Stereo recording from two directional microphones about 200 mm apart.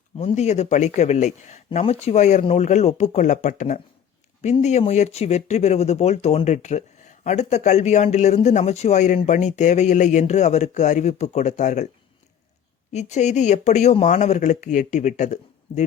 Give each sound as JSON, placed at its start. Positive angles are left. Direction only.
{"t": 0.2, "sound": "speech", "side_deg": 35}
{"t": 12.9, "sound": "speech", "side_deg": 35}